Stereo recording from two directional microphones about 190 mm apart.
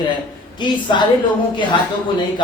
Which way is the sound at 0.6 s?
25° left (ahead or behind).